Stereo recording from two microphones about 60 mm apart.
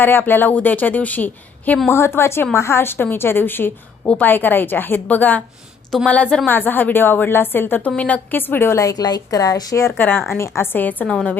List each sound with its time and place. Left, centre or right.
0.0 s a woman's voice: left
1.9 s a woman's voice: left
7.9 s a woman's voice: left
8.8 s a woman's voice: left
10.0 s a woman's voice: left
10.2 s a woman's voice: left
11.0 s a woman's voice: centre